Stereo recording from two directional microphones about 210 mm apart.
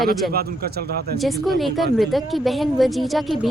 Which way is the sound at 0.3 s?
45° right (ahead or behind).